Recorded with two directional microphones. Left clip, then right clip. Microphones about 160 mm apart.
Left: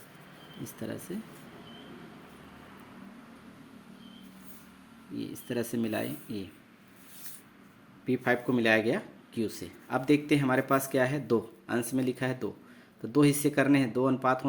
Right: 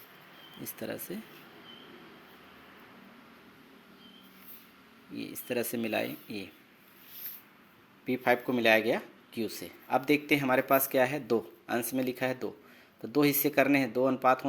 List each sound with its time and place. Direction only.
0.6 s speech: 25° right (ahead or behind)
5.1 s speech: 25° right (ahead or behind)
8.0 s speech: 35° right (ahead or behind)